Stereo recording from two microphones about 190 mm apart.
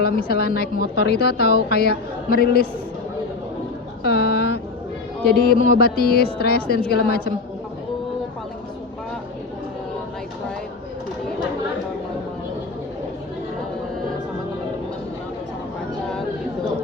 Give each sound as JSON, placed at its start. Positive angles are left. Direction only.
{"t": 0.0, "sound": "speech", "side_deg": 55}
{"t": 4.0, "sound": "a sound", "side_deg": 55}
{"t": 5.2, "sound": "speech", "side_deg": 55}